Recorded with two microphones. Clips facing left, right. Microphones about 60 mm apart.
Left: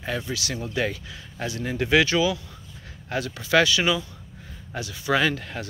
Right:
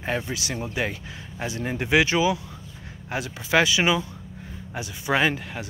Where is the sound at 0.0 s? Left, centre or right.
Right.